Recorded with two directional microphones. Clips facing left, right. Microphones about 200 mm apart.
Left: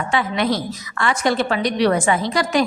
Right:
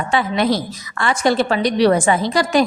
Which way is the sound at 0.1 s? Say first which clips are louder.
Right 3 dB; 35° right (ahead or behind).